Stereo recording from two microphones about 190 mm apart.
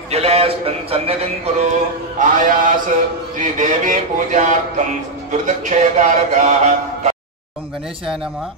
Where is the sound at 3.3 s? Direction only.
40° right (ahead or behind).